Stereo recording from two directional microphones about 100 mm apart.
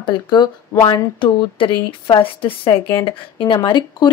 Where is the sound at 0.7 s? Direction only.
25° left (ahead or behind).